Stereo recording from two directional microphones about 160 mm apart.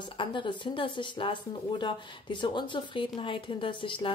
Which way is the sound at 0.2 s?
30° left (ahead or behind).